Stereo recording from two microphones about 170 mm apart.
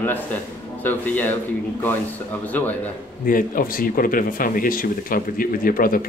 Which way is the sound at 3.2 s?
55° left (ahead or behind).